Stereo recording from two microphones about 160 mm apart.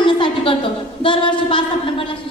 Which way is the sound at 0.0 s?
30° left (ahead or behind).